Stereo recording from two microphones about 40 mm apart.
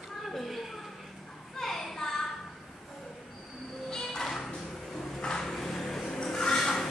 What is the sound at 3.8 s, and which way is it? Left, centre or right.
Music, centre.